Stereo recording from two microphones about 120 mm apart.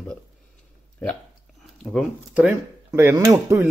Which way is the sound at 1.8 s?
5° left (ahead or behind).